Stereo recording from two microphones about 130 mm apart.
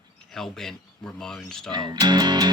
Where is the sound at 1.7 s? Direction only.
30° right (ahead or behind).